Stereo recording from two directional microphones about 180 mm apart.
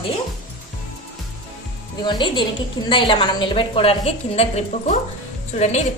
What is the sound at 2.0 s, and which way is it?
A woman's voice, 25° left (ahead or behind).